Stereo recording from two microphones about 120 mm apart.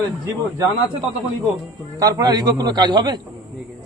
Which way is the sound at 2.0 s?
35° right (ahead or behind).